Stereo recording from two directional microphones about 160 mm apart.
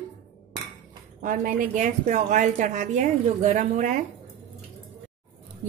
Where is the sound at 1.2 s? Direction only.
55° right (ahead or behind).